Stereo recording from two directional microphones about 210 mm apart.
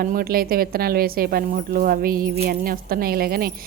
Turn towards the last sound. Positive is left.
turn(degrees=-45)  # may be behind; listen again after turning